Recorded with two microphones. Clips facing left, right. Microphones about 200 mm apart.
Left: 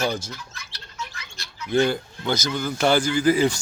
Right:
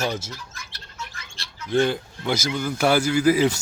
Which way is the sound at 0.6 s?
50° right (ahead or behind).